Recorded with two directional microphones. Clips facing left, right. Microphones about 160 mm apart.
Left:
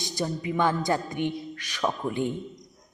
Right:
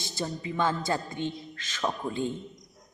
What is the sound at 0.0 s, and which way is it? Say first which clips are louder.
A man's voice: left 4 dB; 15° left (ahead or behind).